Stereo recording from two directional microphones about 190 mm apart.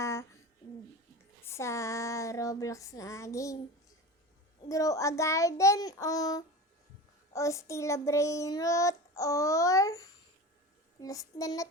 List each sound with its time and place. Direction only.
0.0 s a sound: 15° left (ahead or behind)
1.5 s child singing: 15° left (ahead or behind)
4.7 s child singing: 15° left (ahead or behind)